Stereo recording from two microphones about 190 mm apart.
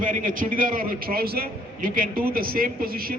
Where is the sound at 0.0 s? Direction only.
45° right (ahead or behind).